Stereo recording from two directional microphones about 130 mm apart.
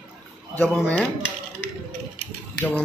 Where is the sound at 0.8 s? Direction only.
Centre (ahead or behind).